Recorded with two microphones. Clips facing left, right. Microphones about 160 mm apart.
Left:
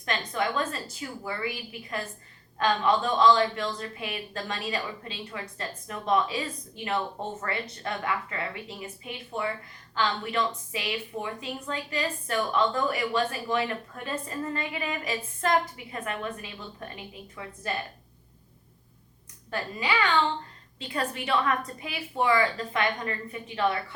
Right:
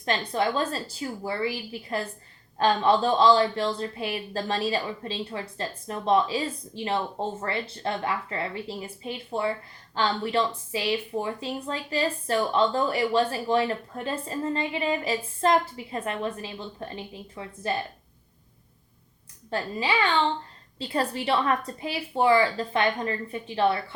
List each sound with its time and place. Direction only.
0.0 s speech: 30° right (ahead or behind)
19.5 s a woman's voice: 30° right (ahead or behind)